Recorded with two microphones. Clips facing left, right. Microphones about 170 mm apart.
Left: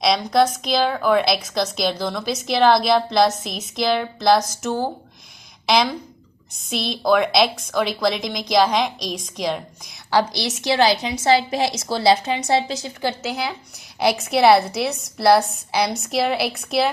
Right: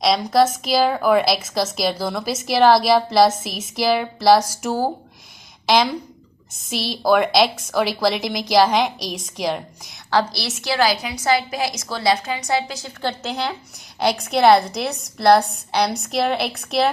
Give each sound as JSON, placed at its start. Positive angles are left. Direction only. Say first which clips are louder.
{"t": 0.0, "sound": "a woman's voice", "louder": "right 1 dB", "side_deg": 0}
{"t": 10.1, "sound": "a woman's voice", "louder": "left 1 dB", "side_deg": 15}
{"t": 13.0, "sound": "a woman's voice", "louder": "right 1 dB", "side_deg": 5}